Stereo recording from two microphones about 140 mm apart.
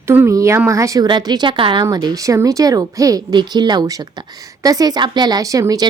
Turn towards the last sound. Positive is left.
turn(degrees=-25)  # may be behind; listen again after turning